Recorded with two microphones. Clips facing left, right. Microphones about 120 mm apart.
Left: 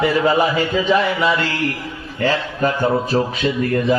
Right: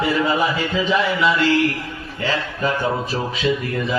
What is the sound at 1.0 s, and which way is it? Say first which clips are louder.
Speech: even; 45° left (ahead or behind).